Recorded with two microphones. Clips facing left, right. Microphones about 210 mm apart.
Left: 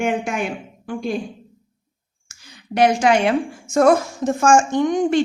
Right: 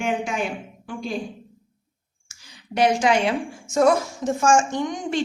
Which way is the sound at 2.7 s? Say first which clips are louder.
Left 3 dB; 60° left (ahead or behind).